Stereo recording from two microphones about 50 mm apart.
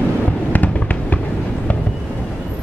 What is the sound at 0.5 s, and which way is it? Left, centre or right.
Fireworks, left.